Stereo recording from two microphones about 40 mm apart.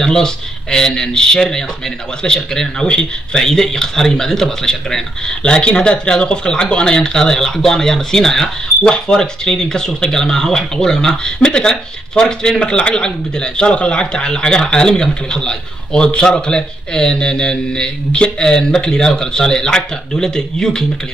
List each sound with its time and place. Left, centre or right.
0.0 s speech: centre
5.4 s speech: left